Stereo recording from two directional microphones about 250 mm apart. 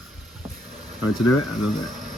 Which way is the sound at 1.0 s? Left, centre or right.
Left.